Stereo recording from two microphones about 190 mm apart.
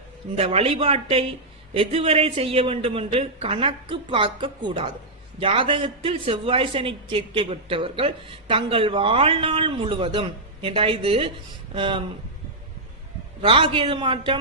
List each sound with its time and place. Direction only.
0.3 s speech: 30° right (ahead or behind)
13.4 s speech: 30° right (ahead or behind)